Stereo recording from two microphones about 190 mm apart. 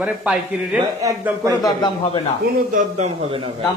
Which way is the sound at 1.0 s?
15° right (ahead or behind).